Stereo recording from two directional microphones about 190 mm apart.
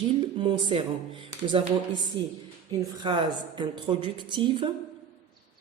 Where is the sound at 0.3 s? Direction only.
25° right (ahead or behind).